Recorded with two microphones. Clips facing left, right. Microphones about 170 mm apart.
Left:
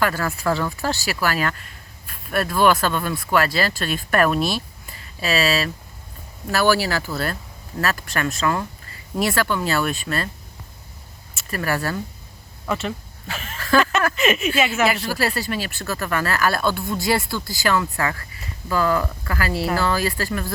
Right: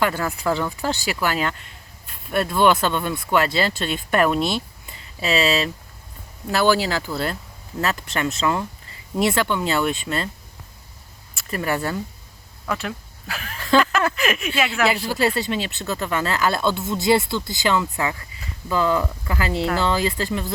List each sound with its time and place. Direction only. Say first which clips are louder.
0.0 s speech: even; 20° right (ahead or behind)
11.5 s speech: even; 20° right (ahead or behind)
12.6 s a sound: left 2 dB; centre (ahead or behind)
14.2 s speech: left 3 dB; centre (ahead or behind)
15.4 s speech: right 2 dB; 20° right (ahead or behind)